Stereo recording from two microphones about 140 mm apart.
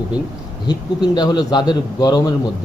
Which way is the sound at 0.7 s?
30° left (ahead or behind).